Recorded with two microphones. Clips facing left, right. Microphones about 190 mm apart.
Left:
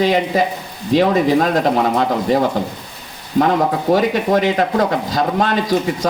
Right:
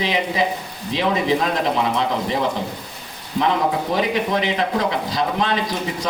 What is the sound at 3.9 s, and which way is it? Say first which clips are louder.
Speech: left 6 dB; 45° left (ahead or behind).